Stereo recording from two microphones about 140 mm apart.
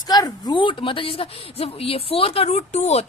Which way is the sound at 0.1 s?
30° left (ahead or behind).